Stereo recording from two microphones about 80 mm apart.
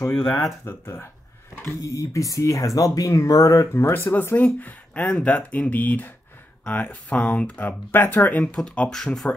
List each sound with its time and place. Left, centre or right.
0.1 s speech: centre
0.7 s a sound: left
1.8 s speech: left
3.7 s speech: left; by 9.3 s centre